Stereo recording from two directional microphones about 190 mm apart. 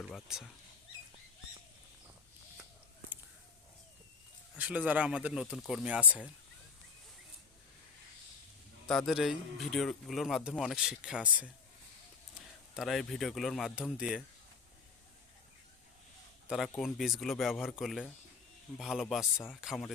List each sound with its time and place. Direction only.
0.1 s speech: centre (ahead or behind)
4.5 s speech: 10° right (ahead or behind)
8.9 s speech: centre (ahead or behind)
12.7 s speech: centre (ahead or behind)
16.5 s speech: centre (ahead or behind)